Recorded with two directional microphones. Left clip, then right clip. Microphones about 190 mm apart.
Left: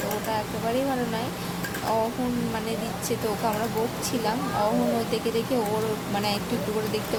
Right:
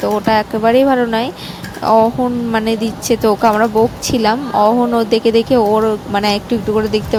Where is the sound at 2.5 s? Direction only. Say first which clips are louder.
Right 13 dB; 50° right (ahead or behind).